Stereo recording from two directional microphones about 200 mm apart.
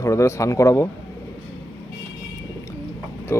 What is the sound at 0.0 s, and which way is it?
Speech, 15° left (ahead or behind).